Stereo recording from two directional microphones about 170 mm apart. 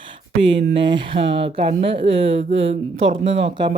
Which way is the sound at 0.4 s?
30° right (ahead or behind).